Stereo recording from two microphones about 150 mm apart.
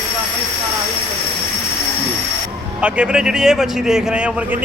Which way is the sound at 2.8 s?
5° right (ahead or behind).